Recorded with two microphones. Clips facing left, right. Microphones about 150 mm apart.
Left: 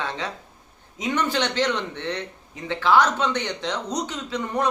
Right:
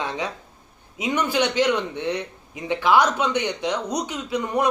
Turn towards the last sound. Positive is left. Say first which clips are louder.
# right 3 dB
turn(degrees=-10)  # may be behind; listen again after turning